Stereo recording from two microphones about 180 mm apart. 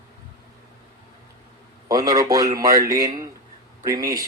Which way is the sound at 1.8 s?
20° right (ahead or behind).